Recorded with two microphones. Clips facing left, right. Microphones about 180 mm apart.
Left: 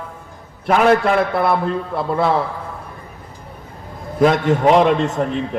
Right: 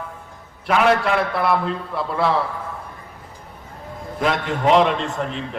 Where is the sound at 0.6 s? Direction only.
50° left (ahead or behind).